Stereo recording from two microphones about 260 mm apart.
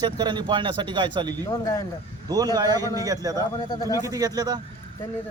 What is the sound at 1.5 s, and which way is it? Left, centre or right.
Speech, centre.